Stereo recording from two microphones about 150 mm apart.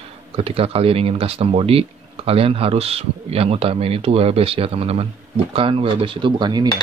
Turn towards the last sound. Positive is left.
turn(degrees=-30)  # may be behind; listen again after turning